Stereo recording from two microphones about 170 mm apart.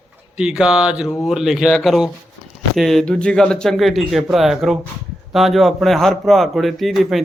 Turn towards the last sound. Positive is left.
turn(degrees=0)  # may be behind; listen again after turning